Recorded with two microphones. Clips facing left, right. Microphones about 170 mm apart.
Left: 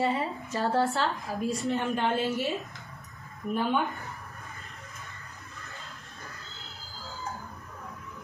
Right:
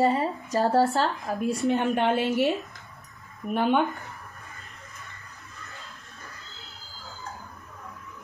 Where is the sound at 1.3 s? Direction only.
55° right (ahead or behind).